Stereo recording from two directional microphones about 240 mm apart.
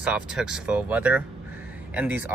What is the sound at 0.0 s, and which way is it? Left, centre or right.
Speech, centre.